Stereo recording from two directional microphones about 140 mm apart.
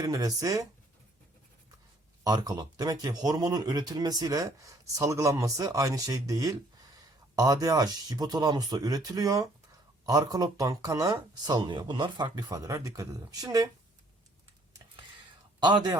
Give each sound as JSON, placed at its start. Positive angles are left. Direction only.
{"t": 0.0, "sound": "speech", "side_deg": -25}
{"t": 2.2, "sound": "speech", "side_deg": -25}
{"t": 15.6, "sound": "a man's voice", "side_deg": -35}